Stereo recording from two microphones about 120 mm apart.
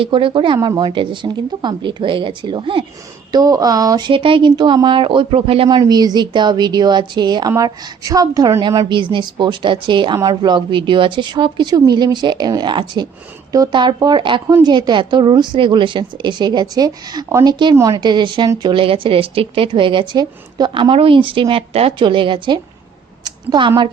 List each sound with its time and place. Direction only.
0.0 s a woman's voice: 45° right (ahead or behind)
3.3 s a woman's voice: 30° right (ahead or behind); by 5.6 s 50° right (ahead or behind)
5.6 s a woman's voice: 35° right (ahead or behind)
20.9 s a woman's voice: 50° right (ahead or behind)